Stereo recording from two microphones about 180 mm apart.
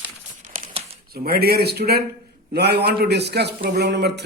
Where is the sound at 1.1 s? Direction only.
60° right (ahead or behind).